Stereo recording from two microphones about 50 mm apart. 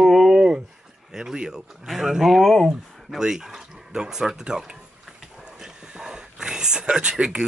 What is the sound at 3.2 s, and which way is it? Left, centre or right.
Speech, centre.